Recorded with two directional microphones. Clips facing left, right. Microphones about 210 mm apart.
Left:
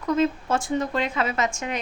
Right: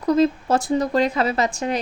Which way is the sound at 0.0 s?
35° right (ahead or behind).